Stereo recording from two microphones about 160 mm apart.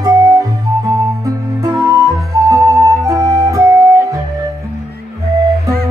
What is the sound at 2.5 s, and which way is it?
Flute, 20° right (ahead or behind).